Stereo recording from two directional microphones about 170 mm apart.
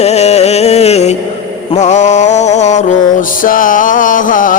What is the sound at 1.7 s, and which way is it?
Music, 45° left (ahead or behind).